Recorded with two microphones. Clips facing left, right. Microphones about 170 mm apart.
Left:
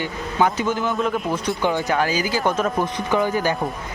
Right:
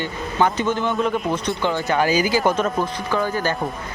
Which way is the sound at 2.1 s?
10° right (ahead or behind).